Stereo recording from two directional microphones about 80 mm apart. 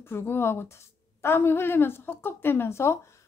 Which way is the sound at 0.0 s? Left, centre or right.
Left.